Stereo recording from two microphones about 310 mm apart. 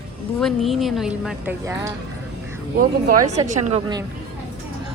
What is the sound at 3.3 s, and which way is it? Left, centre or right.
Speech, right.